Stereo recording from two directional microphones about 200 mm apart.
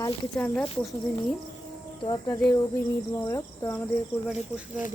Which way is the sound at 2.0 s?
20° left (ahead or behind).